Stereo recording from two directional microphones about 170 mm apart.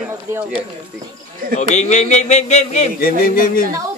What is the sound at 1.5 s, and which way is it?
A man's voice, 40° left (ahead or behind).